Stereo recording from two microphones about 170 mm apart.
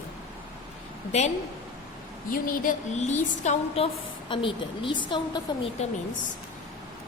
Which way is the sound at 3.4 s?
40° left (ahead or behind).